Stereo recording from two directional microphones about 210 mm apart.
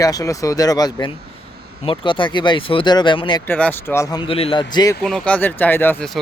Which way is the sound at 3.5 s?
10° left (ahead or behind).